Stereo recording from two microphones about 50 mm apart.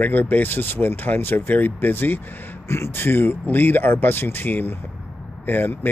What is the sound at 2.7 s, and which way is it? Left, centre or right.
Speech, left.